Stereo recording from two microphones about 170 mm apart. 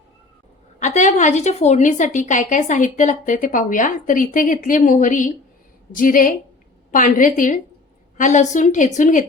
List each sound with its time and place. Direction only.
0.8 s a woman's voice: 45° left (ahead or behind)